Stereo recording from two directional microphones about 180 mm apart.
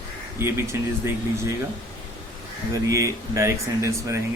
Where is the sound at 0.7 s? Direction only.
10° right (ahead or behind).